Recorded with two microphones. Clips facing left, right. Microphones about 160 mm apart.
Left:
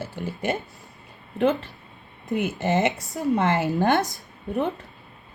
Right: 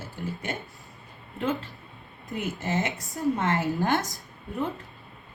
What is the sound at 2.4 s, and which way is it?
Speech, 65° left (ahead or behind).